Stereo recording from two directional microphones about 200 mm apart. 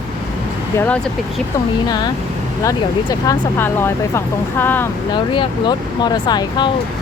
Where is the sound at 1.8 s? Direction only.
20° left (ahead or behind).